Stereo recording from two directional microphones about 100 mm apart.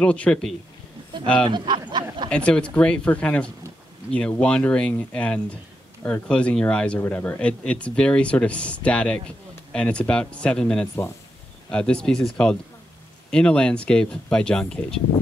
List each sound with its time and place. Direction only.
0.0 s speech: 10° left (ahead or behind)
1.5 s a sound: 50° right (ahead or behind)
2.3 s speech: 10° left (ahead or behind)